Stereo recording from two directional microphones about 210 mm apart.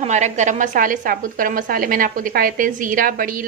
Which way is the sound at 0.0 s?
35° right (ahead or behind).